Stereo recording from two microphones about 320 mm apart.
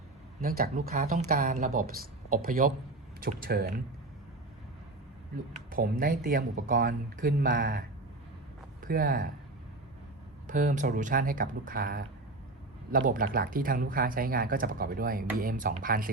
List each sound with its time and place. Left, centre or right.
0.4 s speech: right
5.7 s speech: right
10.4 s speech: right